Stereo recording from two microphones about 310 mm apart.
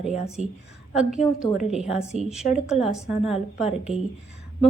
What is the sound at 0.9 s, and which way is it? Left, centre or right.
A woman's voice, centre.